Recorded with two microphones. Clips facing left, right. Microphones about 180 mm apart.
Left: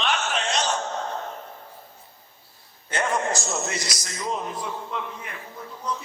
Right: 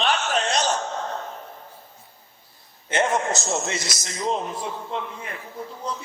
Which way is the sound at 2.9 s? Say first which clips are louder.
Right 3 dB; 20° right (ahead or behind).